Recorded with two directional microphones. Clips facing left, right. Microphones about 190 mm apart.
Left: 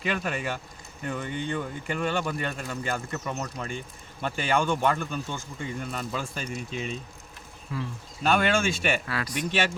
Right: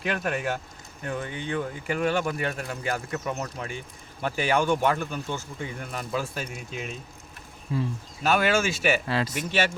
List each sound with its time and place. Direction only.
0.0 s speech: centre (ahead or behind)
7.7 s speech: 25° right (ahead or behind)
8.2 s speech: 5° right (ahead or behind)
9.0 s speech: 25° right (ahead or behind)
9.3 s speech: 5° right (ahead or behind)